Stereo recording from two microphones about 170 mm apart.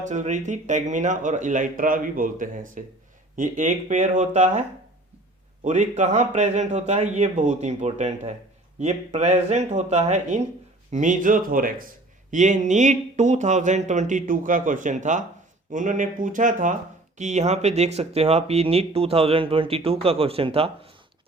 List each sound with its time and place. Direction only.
0.0 s speech: 45° right (ahead or behind)
5.6 s speech: 45° right (ahead or behind)